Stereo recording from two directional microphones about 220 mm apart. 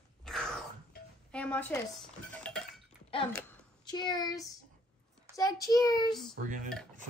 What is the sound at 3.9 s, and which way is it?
Speech, 20° left (ahead or behind).